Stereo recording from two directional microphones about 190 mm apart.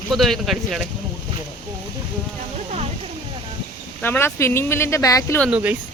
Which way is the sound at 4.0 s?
10° left (ahead or behind).